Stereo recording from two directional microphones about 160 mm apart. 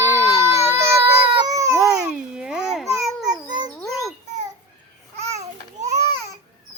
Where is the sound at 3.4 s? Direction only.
25° right (ahead or behind).